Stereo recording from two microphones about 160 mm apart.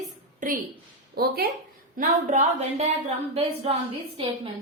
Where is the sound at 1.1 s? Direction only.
75° right (ahead or behind).